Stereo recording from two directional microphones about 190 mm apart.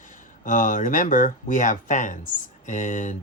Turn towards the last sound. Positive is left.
turn(degrees=40)  # may be behind; listen again after turning